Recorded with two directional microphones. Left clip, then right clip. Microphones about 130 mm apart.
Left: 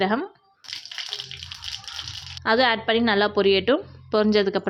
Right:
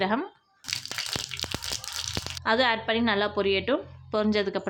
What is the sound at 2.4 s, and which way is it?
A woman's voice, 25° left (ahead or behind).